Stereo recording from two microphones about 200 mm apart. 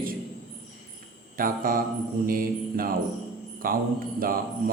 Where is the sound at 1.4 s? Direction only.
45° right (ahead or behind).